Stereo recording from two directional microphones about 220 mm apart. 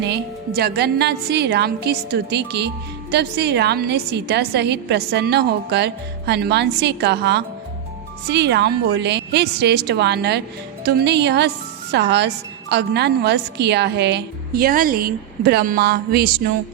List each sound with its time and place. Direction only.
0.0 s a woman's voice: 50° right (ahead or behind)